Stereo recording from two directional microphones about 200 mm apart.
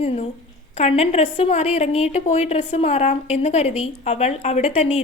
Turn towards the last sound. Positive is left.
turn(degrees=30)  # may be behind; listen again after turning